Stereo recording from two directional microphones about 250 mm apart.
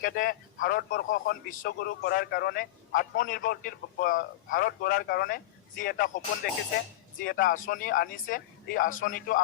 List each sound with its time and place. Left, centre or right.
0.0 s a man's voice: left